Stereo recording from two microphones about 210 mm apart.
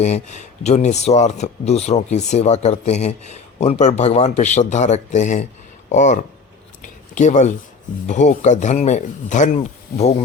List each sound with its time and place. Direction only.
0.0 s speech: 35° left (ahead or behind)
6.8 s a sound: 35° left (ahead or behind)
8.0 s speech: 35° left (ahead or behind)